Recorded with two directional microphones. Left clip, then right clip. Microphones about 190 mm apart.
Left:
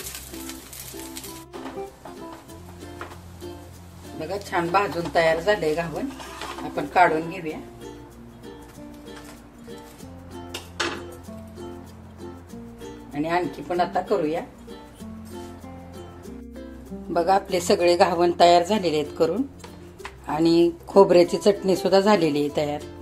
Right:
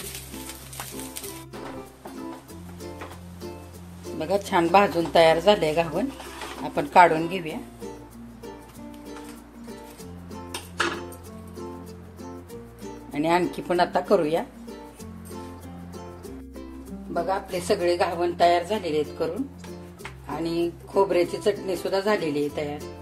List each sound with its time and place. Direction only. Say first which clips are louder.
4.2 s a woman's voice: right 3 dB; 40° right (ahead or behind)
13.1 s a woman's voice: right 2 dB; 40° right (ahead or behind)
17.1 s a woman's voice: left 6 dB; 45° left (ahead or behind)
20.2 s a woman's voice: left 8 dB; 40° left (ahead or behind)